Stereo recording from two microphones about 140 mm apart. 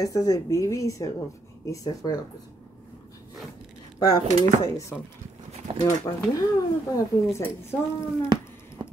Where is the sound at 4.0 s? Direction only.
25° left (ahead or behind).